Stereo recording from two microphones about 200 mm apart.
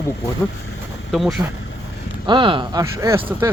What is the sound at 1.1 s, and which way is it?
Speech, centre (ahead or behind).